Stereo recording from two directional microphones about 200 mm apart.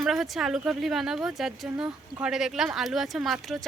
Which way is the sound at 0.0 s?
Centre (ahead or behind).